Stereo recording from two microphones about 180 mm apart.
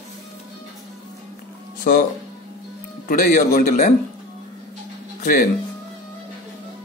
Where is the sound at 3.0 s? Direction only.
50° left (ahead or behind).